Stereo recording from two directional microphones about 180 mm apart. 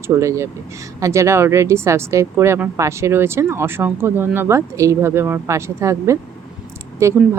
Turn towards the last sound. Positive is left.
turn(degrees=-15)  # may be behind; listen again after turning